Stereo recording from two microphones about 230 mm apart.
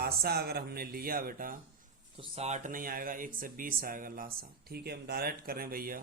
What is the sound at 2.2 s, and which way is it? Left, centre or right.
Speech, right.